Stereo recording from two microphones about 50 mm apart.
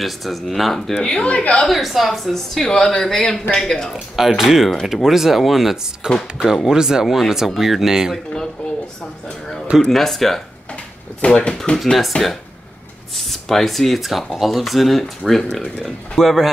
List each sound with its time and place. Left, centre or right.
0.0 s speech: centre
0.9 s speech: centre
1.7 s speech: centre
3.9 s speech: centre
9.8 s speech: centre
11.2 s speech: left
11.8 s speech: centre
13.1 s speech: centre